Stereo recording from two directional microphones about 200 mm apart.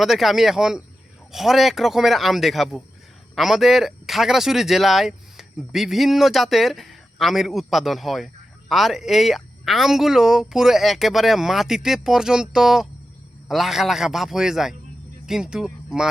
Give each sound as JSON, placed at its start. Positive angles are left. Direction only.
{"t": 0.0, "sound": "speech", "side_deg": 0}